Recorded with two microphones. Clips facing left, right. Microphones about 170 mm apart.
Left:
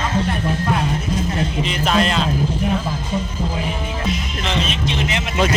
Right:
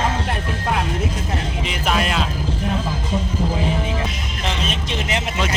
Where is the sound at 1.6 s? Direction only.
10° right (ahead or behind).